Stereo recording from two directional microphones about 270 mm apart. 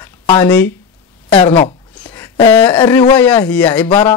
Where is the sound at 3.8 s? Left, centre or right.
Centre.